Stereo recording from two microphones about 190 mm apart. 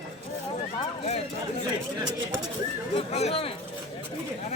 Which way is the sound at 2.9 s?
35° left (ahead or behind).